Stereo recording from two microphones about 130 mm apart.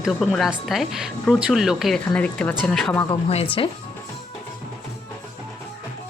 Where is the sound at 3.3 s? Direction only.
45° left (ahead or behind).